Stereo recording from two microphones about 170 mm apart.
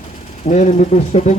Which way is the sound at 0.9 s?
40° left (ahead or behind).